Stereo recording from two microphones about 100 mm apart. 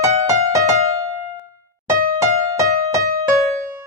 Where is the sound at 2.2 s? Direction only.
35° right (ahead or behind).